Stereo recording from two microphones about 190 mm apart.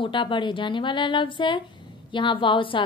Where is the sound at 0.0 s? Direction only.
25° left (ahead or behind).